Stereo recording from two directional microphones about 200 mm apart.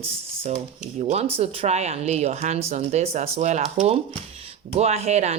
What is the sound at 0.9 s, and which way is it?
Speech, 35° right (ahead or behind).